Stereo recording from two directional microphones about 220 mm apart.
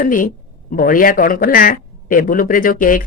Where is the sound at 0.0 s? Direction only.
40° left (ahead or behind).